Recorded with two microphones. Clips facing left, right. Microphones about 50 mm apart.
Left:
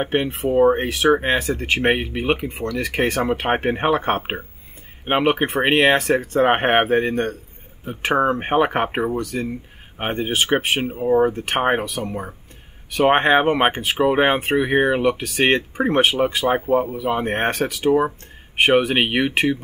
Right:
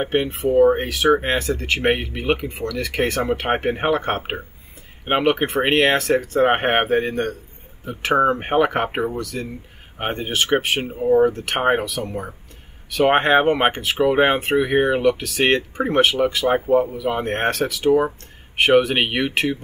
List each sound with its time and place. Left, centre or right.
0.0 s speech: centre